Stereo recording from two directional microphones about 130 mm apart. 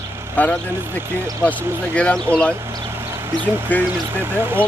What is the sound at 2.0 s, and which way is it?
Speech, 10° left (ahead or behind).